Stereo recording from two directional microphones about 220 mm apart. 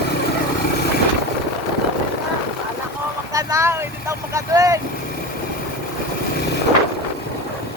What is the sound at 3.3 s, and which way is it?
Vehicle, 15° right (ahead or behind).